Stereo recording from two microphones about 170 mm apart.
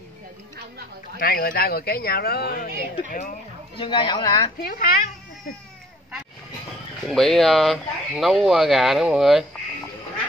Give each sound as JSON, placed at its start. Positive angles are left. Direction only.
{"t": 1.2, "sound": "speech", "side_deg": 60}
{"t": 3.7, "sound": "speech", "side_deg": 30}
{"t": 4.6, "sound": "speech", "side_deg": 60}
{"t": 7.1, "sound": "speech", "side_deg": 0}